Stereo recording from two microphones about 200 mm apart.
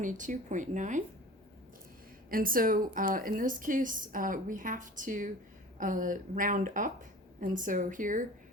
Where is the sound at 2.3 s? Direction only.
45° right (ahead or behind).